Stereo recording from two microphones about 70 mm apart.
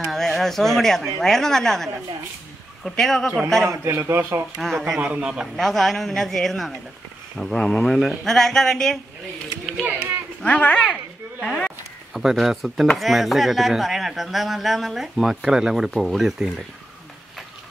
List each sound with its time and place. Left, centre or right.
0.0 s speech: centre
3.7 s a man's voice: right
4.6 s speech: centre
5.0 s a man's voice: centre
5.6 s speech: centre
10.4 s a child's voice: centre
12.1 s speech: centre